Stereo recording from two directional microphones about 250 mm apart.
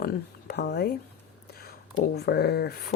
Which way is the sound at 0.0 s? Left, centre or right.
Left.